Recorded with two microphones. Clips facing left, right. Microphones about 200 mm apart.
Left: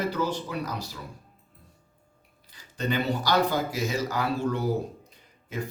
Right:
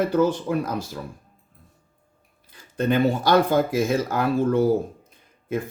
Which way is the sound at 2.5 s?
55° right (ahead or behind).